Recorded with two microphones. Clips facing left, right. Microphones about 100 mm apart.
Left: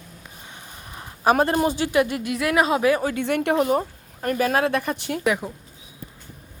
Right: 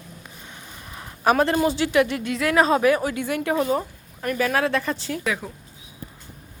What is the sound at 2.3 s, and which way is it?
Speech, 25° left (ahead or behind).